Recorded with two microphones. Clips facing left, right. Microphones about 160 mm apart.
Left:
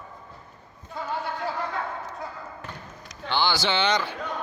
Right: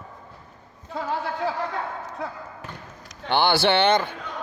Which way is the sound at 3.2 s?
60° right (ahead or behind).